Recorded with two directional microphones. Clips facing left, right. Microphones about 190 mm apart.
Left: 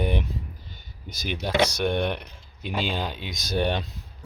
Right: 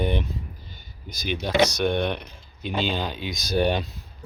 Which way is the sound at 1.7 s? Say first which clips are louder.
Right 1 dB; 10° left (ahead or behind).